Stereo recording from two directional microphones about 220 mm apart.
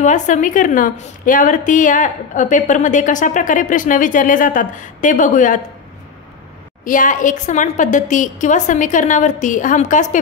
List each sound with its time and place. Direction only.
0.0 s a woman's voice: 35° left (ahead or behind)
6.8 s a woman's voice: 35° left (ahead or behind)